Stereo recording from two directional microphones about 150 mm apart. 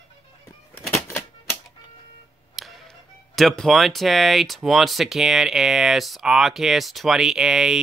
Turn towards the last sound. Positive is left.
turn(degrees=-5)  # may be behind; listen again after turning